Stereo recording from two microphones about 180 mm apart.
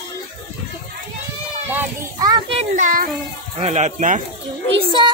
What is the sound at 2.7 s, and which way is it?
A child's voice, 50° right (ahead or behind).